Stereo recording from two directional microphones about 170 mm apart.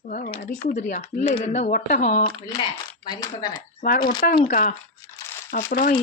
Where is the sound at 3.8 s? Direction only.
50° left (ahead or behind).